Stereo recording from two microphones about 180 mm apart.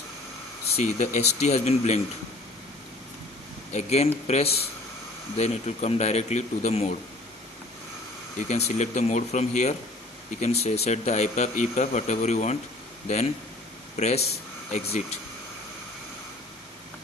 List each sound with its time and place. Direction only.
0.8 s speech: 40° left (ahead or behind)
3.7 s speech: 35° left (ahead or behind)
8.4 s speech: 40° left (ahead or behind)